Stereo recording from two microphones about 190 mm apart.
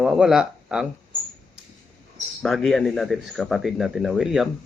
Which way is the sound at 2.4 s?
Centre (ahead or behind).